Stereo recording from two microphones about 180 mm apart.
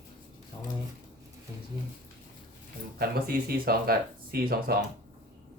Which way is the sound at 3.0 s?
60° right (ahead or behind).